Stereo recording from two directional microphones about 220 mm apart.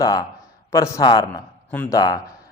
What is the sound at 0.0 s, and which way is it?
A man's voice, 15° left (ahead or behind).